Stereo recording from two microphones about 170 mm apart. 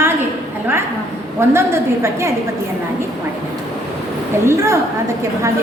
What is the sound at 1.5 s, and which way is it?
Speech, 15° right (ahead or behind).